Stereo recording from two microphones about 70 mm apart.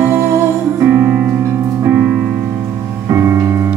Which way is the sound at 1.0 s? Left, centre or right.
Centre.